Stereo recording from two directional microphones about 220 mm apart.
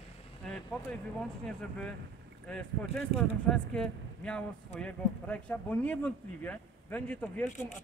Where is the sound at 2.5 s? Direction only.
5° left (ahead or behind).